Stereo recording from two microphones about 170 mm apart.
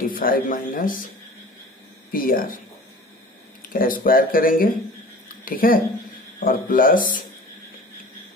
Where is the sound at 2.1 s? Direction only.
55° left (ahead or behind).